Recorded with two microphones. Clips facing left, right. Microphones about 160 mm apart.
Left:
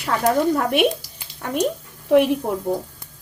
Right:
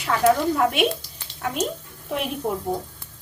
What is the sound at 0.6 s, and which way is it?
Stir, 50° left (ahead or behind).